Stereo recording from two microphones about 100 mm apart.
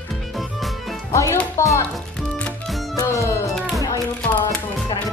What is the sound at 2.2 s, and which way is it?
Music, 10° left (ahead or behind).